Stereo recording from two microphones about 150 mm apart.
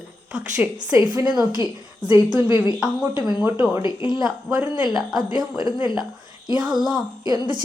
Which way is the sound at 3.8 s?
30° left (ahead or behind).